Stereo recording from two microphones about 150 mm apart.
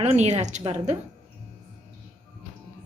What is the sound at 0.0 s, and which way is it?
Speech, 50° right (ahead or behind).